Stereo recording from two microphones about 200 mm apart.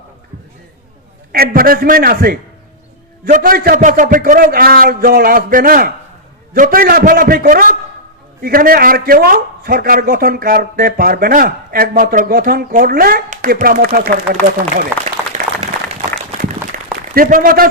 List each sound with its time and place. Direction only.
1.3 s a man's voice: 45° right (ahead or behind)
14.9 s a man's voice: 10° right (ahead or behind)
16.7 s a sound: 40° right (ahead or behind)
17.2 s a man's voice: 45° right (ahead or behind)